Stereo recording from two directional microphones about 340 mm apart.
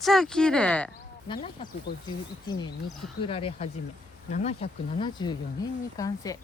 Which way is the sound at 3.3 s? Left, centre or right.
Centre.